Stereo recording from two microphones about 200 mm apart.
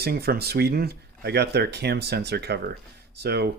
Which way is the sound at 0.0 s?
50° right (ahead or behind).